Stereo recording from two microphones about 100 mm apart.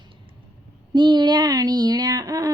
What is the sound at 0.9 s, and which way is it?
Speech, 50° right (ahead or behind).